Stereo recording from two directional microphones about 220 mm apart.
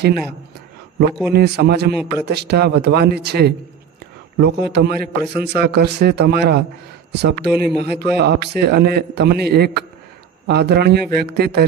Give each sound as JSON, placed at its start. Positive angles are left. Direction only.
{"t": 1.3, "sound": "a man's voice", "side_deg": -45}